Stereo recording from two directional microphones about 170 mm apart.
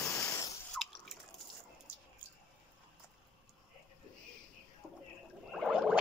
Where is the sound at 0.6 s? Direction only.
Centre (ahead or behind).